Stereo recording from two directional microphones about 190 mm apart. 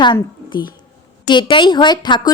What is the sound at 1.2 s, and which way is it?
A woman's voice, 25° left (ahead or behind).